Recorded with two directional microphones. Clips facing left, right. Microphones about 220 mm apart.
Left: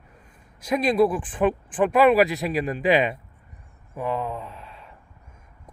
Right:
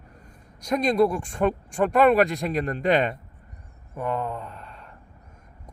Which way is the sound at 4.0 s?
Centre (ahead or behind).